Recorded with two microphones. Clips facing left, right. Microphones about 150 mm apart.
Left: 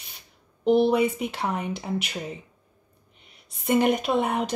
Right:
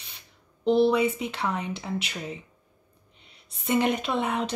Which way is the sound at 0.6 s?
10° left (ahead or behind).